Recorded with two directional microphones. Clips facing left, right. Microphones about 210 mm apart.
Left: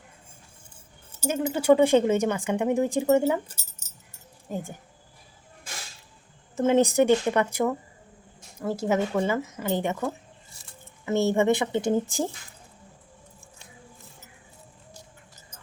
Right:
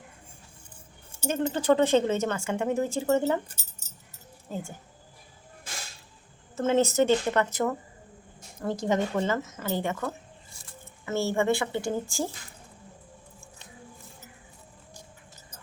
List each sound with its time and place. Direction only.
1.2 s speech: 10° left (ahead or behind)
4.4 s speech: 15° left (ahead or behind)
6.6 s a woman's voice: 15° left (ahead or behind)